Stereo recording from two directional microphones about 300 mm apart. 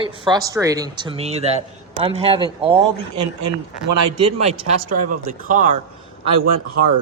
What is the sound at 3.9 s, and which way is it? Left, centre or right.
Speech, right.